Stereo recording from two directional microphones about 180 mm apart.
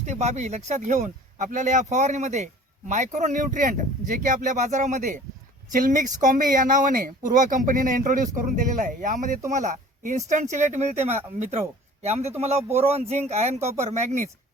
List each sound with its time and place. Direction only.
0.0 s speech: 40° right (ahead or behind)